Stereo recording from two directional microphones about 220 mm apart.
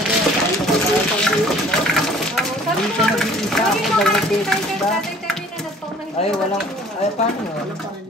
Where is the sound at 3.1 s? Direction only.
Centre (ahead or behind).